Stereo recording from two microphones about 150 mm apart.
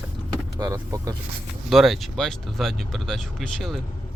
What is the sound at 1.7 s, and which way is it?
Speech, centre (ahead or behind).